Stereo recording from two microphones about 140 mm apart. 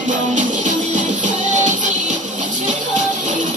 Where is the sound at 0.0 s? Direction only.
65° right (ahead or behind).